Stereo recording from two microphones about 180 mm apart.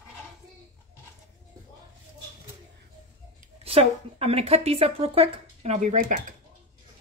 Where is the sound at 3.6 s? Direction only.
35° right (ahead or behind).